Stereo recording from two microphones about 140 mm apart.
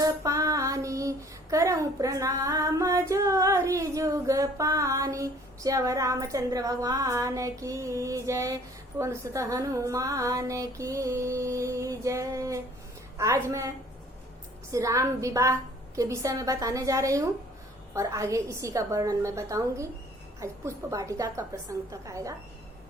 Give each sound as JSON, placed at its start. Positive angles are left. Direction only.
{"t": 0.0, "sound": "female singing", "side_deg": -25}
{"t": 9.0, "sound": "a woman's voice", "side_deg": -20}